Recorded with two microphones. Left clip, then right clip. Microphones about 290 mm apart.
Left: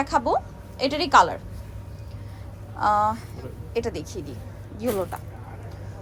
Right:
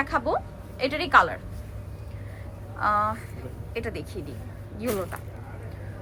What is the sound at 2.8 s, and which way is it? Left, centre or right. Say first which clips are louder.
Speech: left 3 dB; centre.